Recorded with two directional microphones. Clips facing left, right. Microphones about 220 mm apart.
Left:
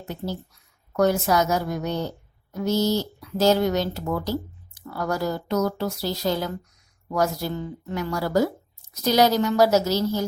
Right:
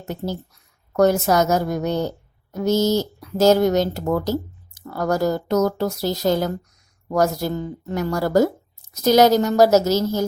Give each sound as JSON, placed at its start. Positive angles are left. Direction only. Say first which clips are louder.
{"t": 0.0, "sound": "a woman's voice", "louder": "right 3 dB", "side_deg": -45}